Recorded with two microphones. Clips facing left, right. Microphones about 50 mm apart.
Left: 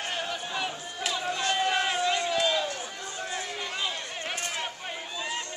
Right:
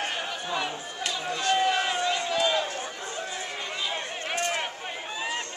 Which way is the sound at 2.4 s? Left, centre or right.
Centre.